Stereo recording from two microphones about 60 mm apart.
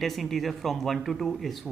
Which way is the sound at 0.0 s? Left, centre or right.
Centre.